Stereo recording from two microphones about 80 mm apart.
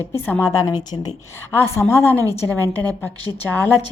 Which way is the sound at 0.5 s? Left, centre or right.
Left.